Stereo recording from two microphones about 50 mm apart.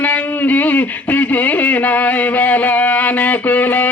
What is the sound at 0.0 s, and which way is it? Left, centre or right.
Speech, left.